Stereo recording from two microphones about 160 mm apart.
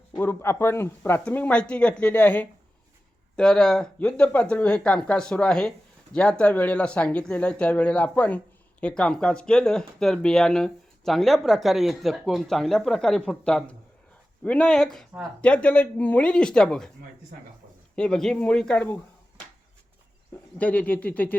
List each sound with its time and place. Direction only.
0.2 s speech: 15° left (ahead or behind)
17.9 s speech: 5° left (ahead or behind)
20.6 s speech: 10° left (ahead or behind)